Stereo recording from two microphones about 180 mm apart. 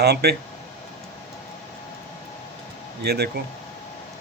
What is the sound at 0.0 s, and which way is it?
Speech, 65° right (ahead or behind).